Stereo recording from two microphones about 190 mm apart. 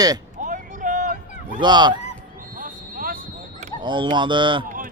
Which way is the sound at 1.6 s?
25° right (ahead or behind).